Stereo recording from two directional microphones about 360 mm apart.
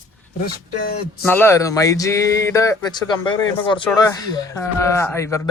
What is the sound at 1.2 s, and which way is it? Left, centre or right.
Speech, centre.